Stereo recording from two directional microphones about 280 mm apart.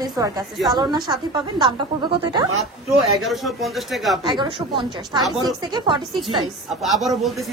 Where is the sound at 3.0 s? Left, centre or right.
Centre.